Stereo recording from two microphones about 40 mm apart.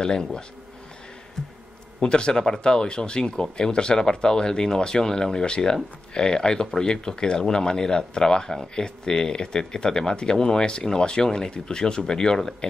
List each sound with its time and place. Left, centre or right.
0.0 s speech: centre
2.0 s speech: left